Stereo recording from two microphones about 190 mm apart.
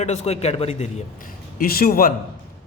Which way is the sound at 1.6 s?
50° left (ahead or behind).